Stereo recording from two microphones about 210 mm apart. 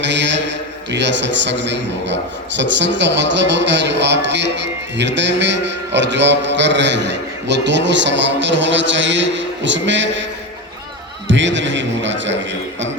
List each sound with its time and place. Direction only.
0.0 s speech: 60° right (ahead or behind)
11.3 s speech: 60° right (ahead or behind)